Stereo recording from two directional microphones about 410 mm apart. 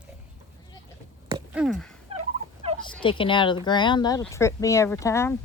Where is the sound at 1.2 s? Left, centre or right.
Centre.